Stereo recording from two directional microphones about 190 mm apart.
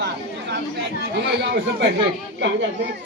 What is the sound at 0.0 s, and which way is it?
Chatter, 65° right (ahead or behind).